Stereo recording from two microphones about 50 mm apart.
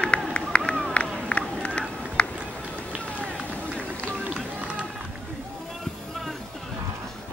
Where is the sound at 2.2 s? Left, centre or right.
Left.